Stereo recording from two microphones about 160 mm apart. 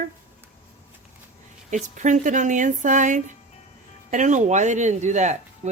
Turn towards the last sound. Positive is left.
turn(degrees=-45)  # may be behind; listen again after turning